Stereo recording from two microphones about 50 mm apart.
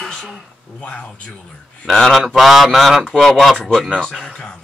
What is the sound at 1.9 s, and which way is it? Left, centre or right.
Speech, centre.